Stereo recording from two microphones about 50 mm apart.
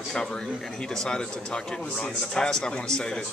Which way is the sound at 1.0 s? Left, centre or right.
Centre.